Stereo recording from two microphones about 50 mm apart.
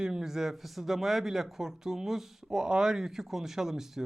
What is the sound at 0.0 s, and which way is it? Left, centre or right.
A man's voice, centre.